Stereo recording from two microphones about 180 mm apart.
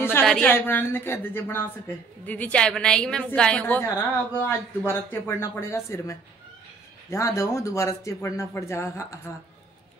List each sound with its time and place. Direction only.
0.2 s speech: 5° left (ahead or behind)